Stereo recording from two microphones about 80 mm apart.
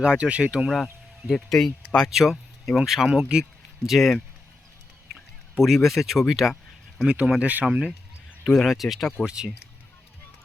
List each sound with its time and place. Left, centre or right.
0.0 s speech: centre
1.3 s speech: centre
8.4 s speech: centre
9.2 s speech: centre